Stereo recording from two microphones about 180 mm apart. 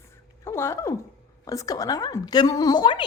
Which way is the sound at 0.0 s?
15° left (ahead or behind).